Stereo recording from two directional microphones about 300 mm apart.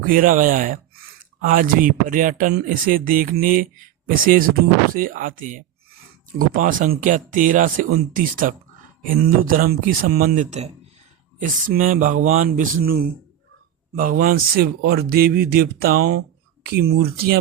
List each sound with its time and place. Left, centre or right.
0.0 s speech: right